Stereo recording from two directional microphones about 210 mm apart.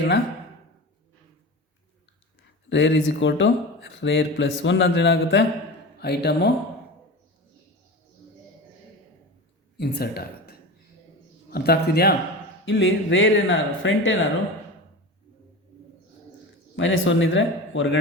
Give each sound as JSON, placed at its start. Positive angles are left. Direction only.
{"t": 2.6, "sound": "a man's voice", "side_deg": 60}
{"t": 9.7, "sound": "speech", "side_deg": 50}
{"t": 11.5, "sound": "a man's voice", "side_deg": 50}
{"t": 12.6, "sound": "speech", "side_deg": 60}
{"t": 16.7, "sound": "speech", "side_deg": 65}